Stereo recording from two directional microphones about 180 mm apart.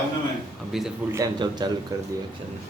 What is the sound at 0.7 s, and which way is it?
Speech, centre (ahead or behind).